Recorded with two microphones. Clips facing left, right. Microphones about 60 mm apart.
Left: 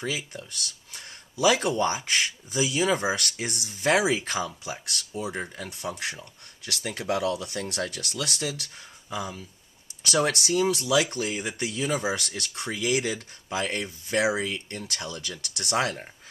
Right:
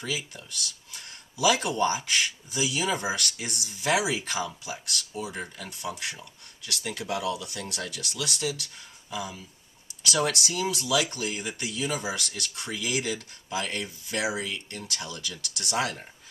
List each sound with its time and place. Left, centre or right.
0.0 s speech: left
4.6 s speech: left